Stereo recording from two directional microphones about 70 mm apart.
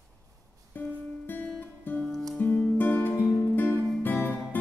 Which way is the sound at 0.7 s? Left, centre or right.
Left.